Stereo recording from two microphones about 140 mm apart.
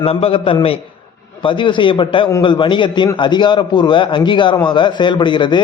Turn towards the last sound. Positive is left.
turn(degrees=35)  # may be behind; listen again after turning